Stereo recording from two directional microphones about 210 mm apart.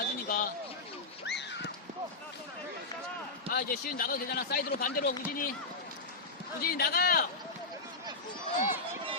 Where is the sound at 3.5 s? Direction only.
45° left (ahead or behind).